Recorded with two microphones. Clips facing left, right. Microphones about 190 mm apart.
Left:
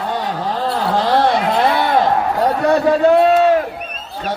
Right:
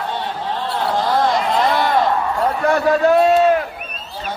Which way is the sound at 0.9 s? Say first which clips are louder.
Left 3 dB; 75° left (ahead or behind).